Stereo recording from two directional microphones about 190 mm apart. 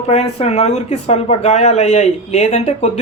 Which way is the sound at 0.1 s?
35° left (ahead or behind).